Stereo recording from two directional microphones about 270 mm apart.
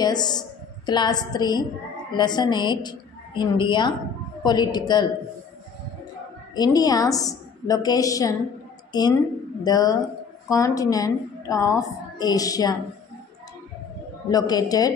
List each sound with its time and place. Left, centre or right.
0.0 s a woman's voice: centre
6.5 s a woman's voice: centre
14.3 s a woman's voice: centre